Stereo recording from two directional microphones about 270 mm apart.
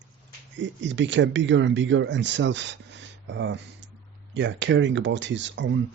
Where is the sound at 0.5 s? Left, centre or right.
Right.